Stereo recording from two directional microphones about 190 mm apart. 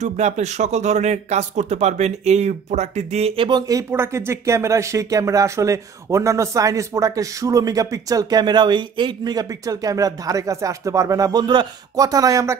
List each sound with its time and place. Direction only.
0.0 s speech: 35° right (ahead or behind); by 12.5 s 15° right (ahead or behind)